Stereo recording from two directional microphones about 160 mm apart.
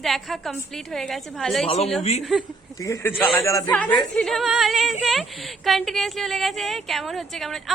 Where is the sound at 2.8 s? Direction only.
15° left (ahead or behind).